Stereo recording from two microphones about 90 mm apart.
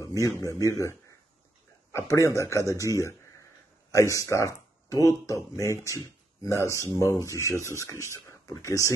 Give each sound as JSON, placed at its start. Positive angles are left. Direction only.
{"t": 0.0, "sound": "speech", "side_deg": 35}